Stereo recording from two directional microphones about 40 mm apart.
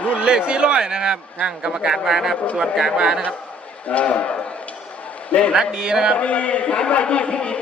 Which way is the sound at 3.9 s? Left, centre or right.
Left.